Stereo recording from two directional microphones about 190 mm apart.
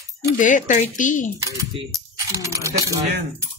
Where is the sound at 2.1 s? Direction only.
15° right (ahead or behind).